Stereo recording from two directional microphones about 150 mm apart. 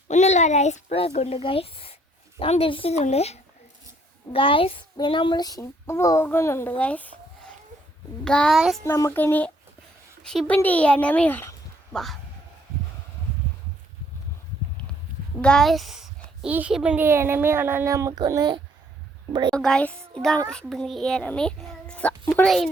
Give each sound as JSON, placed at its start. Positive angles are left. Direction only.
{"t": 0.1, "sound": "a child's voice", "side_deg": 50}
{"t": 8.8, "sound": "a child's voice", "side_deg": 20}
{"t": 15.4, "sound": "a child's voice", "side_deg": 5}
{"t": 19.5, "sound": "a child's voice", "side_deg": 5}